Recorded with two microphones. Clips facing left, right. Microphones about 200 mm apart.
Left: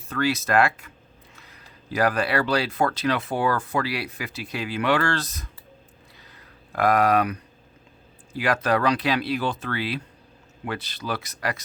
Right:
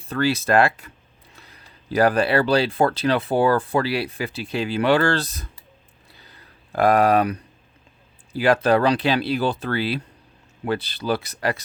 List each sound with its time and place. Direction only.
0.1 s speech: 30° right (ahead or behind)
1.9 s speech: 30° right (ahead or behind)
6.1 s a sound: 30° right (ahead or behind)
8.3 s speech: 30° right (ahead or behind)